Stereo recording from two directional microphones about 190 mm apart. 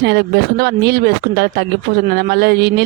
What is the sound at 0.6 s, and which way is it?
Speech, 60° right (ahead or behind).